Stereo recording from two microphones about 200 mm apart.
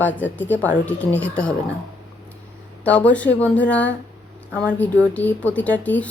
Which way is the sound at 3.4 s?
5° left (ahead or behind).